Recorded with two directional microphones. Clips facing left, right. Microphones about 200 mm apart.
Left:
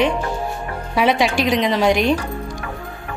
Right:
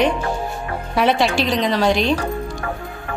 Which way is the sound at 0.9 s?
10° left (ahead or behind).